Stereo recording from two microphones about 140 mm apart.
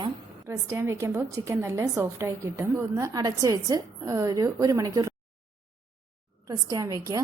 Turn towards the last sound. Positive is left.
turn(degrees=-25)  # may be behind; listen again after turning